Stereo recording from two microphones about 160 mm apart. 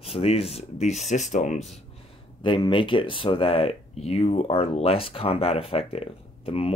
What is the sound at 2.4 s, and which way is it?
Speech, 30° left (ahead or behind).